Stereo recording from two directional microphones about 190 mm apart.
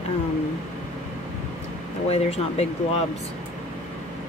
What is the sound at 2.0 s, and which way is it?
Speech, 35° left (ahead or behind).